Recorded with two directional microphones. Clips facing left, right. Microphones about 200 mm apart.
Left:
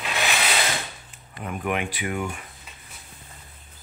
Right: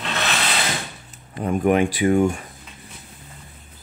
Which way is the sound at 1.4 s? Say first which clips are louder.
Right 9 dB; 35° right (ahead or behind).